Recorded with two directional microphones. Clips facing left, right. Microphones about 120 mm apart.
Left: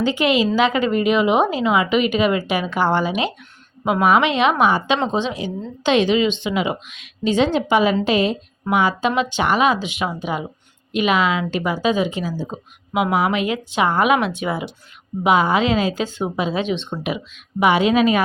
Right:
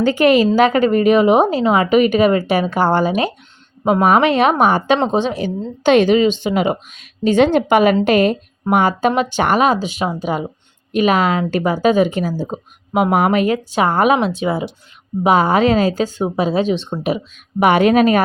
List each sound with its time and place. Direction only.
0.0 s a woman's voice: 45° right (ahead or behind); by 14.7 s 30° right (ahead or behind)
15.2 s a woman's voice: 40° right (ahead or behind)
17.6 s a woman's voice: 55° right (ahead or behind)